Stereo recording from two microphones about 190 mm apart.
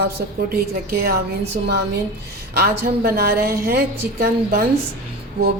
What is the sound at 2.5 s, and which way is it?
A woman's voice, 55° right (ahead or behind).